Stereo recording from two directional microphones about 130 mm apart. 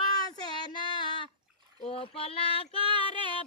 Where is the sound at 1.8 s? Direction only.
45° left (ahead or behind).